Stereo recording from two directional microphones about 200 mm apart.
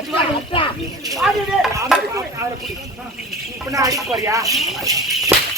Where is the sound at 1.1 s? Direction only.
Centre (ahead or behind).